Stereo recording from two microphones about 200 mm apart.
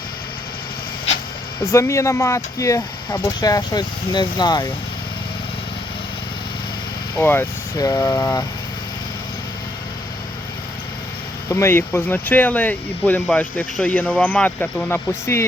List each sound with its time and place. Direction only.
1.6 s speech: 15° left (ahead or behind)
7.2 s speech: 10° left (ahead or behind)
11.4 s speech: 15° left (ahead or behind)